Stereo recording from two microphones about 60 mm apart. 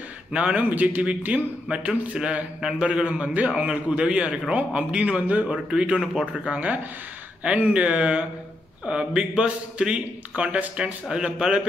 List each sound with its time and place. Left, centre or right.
0.3 s a man's voice: centre